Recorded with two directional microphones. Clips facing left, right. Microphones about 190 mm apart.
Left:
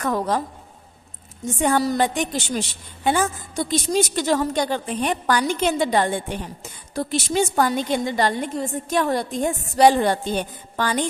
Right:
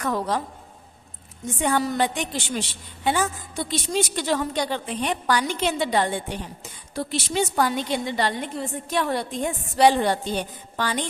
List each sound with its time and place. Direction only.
0.0 s a woman's voice: 45° left (ahead or behind)
1.6 s a woman's voice: 40° left (ahead or behind)